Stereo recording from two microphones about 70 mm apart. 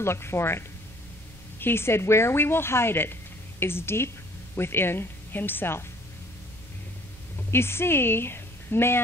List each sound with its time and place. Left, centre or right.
0.0 s speech: left
7.5 s a woman's voice: left